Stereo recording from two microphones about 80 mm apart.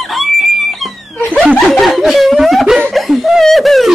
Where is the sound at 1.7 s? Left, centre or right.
Centre.